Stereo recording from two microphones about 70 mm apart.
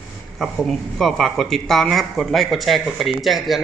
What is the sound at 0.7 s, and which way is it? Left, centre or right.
Speech, centre.